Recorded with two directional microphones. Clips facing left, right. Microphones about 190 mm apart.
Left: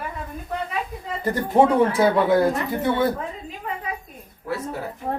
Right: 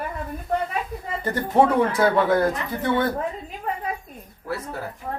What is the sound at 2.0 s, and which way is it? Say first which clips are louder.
Speech: even; 5° left (ahead or behind).